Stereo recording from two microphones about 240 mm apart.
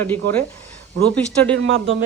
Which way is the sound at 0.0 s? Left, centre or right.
Centre.